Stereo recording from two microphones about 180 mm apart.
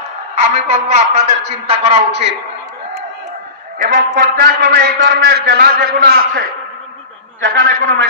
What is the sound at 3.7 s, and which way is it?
A man's voice, 50° right (ahead or behind).